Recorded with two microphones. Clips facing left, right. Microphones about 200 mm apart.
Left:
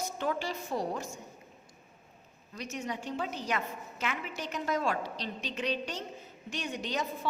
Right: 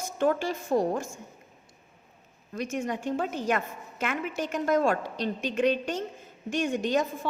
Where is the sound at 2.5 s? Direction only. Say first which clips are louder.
Right 7 dB; 50° right (ahead or behind).